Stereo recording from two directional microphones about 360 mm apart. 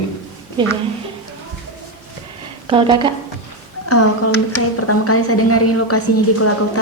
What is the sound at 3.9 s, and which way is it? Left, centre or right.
Speech, left.